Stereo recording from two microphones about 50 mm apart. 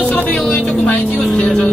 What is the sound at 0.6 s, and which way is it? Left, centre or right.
Speech, centre.